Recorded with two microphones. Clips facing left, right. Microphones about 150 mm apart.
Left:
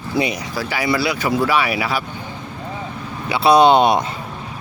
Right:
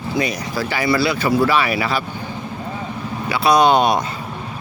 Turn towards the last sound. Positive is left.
turn(degrees=25)  # may be behind; listen again after turning